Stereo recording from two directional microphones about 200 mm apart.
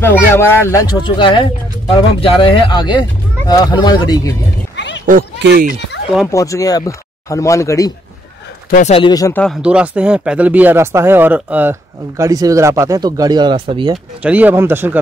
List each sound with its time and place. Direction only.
0.0 s speech: 10° left (ahead or behind)
4.7 s a sound: 60° left (ahead or behind)
5.4 s speech: 50° right (ahead or behind)
6.3 s speech: 15° left (ahead or behind)
8.6 s speech: 40° left (ahead or behind)
8.9 s speech: 20° left (ahead or behind)
9.4 s speech: centre (ahead or behind); by 13.9 s 25° right (ahead or behind)
14.2 s speech: 10° right (ahead or behind)